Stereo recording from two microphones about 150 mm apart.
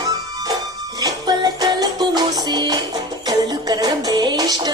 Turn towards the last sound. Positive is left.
turn(degrees=-25)  # may be behind; listen again after turning